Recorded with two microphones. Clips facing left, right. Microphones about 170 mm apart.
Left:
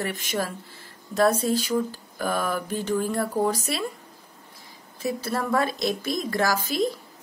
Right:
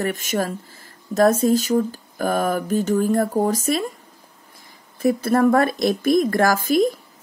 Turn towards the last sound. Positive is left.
turn(degrees=-50)  # may be behind; listen again after turning